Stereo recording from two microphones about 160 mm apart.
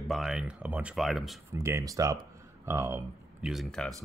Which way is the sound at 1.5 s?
15° right (ahead or behind).